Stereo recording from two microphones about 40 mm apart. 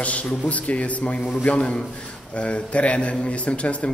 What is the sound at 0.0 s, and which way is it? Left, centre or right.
A man's voice, left.